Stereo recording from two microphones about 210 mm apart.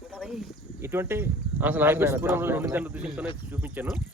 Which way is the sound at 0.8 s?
10° right (ahead or behind).